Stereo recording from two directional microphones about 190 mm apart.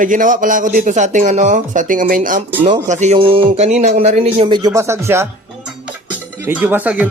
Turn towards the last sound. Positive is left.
turn(degrees=-10)  # may be behind; listen again after turning